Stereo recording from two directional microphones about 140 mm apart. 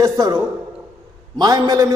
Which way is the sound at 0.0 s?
25° right (ahead or behind).